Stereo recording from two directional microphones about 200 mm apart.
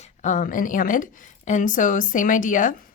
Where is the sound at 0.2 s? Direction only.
40° left (ahead or behind).